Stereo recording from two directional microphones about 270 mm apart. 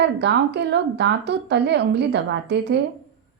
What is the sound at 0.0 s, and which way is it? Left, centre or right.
A woman's voice, right.